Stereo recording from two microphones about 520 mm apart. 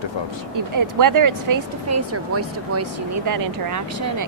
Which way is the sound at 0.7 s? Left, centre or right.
Right.